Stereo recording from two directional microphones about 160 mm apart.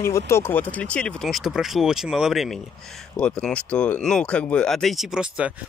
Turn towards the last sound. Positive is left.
turn(degrees=-5)  # may be behind; listen again after turning